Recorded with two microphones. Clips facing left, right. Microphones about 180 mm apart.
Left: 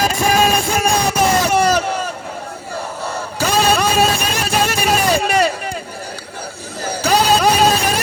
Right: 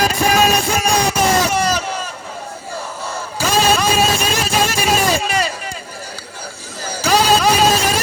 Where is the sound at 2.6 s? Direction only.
60° left (ahead or behind).